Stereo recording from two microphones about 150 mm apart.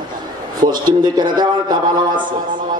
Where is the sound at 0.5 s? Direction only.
65° right (ahead or behind).